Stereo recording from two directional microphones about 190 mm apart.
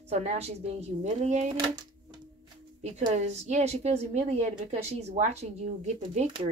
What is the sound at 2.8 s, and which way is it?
A woman's voice, 35° right (ahead or behind).